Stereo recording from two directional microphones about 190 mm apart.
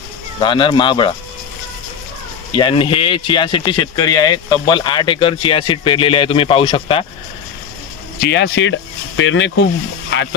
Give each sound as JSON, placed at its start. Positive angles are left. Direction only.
{"t": 0.4, "sound": "speech", "side_deg": 25}
{"t": 2.6, "sound": "speech", "side_deg": 25}
{"t": 8.2, "sound": "speech", "side_deg": 65}